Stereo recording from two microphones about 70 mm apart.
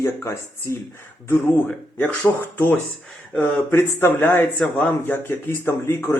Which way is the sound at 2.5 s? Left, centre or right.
Left.